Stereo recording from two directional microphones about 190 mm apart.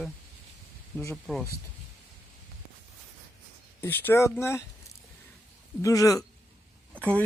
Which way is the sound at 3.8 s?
10° left (ahead or behind).